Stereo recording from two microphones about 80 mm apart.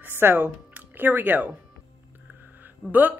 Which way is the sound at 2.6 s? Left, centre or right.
Right.